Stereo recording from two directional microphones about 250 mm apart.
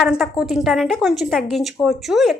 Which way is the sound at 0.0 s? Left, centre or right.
Centre.